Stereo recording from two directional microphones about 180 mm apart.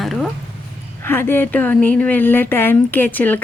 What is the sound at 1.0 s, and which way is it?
A woman's voice, 10° left (ahead or behind).